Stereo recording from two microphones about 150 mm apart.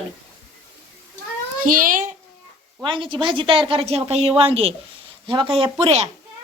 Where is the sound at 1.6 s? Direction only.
65° right (ahead or behind).